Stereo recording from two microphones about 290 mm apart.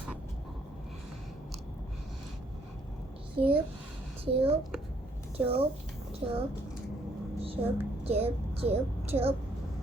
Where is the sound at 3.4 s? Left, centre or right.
Centre.